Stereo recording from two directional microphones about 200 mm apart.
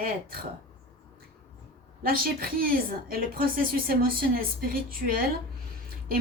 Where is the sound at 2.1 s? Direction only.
45° right (ahead or behind).